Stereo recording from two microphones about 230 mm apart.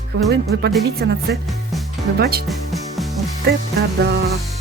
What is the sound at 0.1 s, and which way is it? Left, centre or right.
Speech, right.